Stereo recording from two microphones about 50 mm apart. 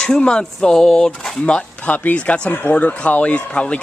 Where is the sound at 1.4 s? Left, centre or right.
Left.